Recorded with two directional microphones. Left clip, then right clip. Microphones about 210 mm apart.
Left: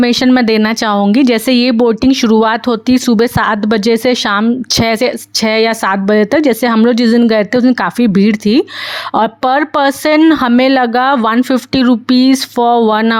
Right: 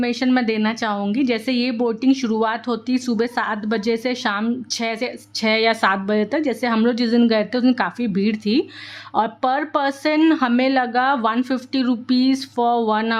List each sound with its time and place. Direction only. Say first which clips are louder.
0.0 s speech: left 10 dB; 40° left (ahead or behind)